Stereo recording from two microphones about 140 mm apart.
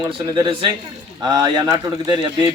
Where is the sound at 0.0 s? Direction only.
30° right (ahead or behind).